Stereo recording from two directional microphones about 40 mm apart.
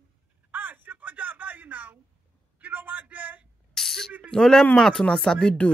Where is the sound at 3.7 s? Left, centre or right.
Centre.